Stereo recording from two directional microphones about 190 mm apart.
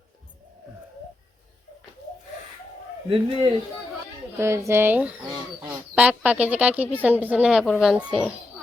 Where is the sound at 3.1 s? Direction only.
30° right (ahead or behind).